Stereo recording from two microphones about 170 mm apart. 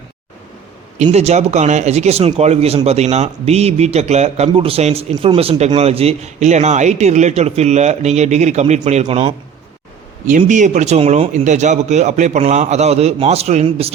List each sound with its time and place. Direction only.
1.1 s speech: 40° right (ahead or behind)
10.2 s speech: 45° right (ahead or behind)